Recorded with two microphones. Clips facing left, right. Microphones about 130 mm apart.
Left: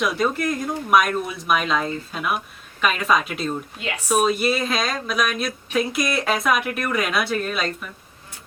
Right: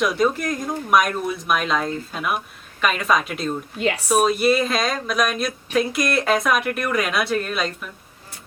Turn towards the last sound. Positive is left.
turn(degrees=0)  # may be behind; listen again after turning